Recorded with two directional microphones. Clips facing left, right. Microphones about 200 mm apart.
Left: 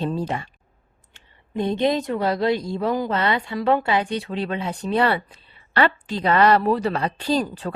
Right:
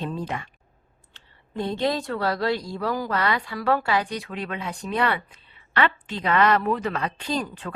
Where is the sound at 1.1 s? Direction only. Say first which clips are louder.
Left 4 dB; 20° left (ahead or behind).